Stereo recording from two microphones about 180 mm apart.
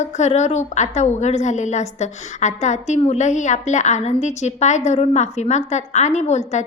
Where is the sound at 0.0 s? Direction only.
40° left (ahead or behind).